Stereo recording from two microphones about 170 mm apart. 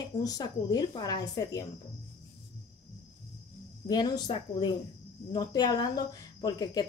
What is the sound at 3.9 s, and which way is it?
A woman's voice, 25° left (ahead or behind).